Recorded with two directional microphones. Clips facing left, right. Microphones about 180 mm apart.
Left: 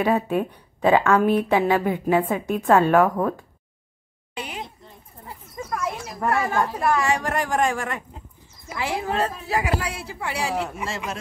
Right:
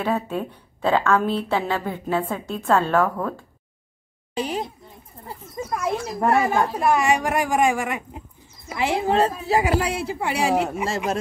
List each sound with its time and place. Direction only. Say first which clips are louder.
0.0 s a woman's voice: left 3 dB; 15° left (ahead or behind)
4.4 s a woman's voice: right 8 dB; 35° right (ahead or behind)
5.7 s a woman's voice: right 4 dB; 25° right (ahead or behind)
8.6 s speech: right 5 dB; 25° right (ahead or behind)